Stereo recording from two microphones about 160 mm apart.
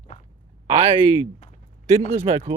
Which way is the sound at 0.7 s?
40° right (ahead or behind).